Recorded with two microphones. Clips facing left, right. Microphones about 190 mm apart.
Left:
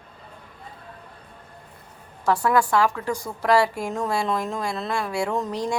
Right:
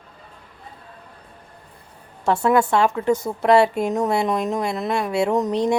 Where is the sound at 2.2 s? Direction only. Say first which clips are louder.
Right 3 dB; 25° right (ahead or behind).